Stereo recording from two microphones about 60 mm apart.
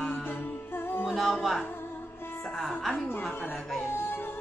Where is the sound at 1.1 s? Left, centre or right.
Centre.